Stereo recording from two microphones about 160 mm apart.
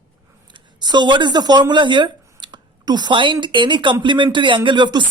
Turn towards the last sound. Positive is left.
turn(degrees=-30)  # may be behind; listen again after turning